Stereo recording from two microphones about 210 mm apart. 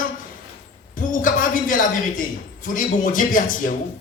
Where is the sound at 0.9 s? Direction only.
40° left (ahead or behind).